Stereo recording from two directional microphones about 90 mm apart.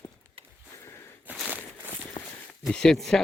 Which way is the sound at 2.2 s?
90° left.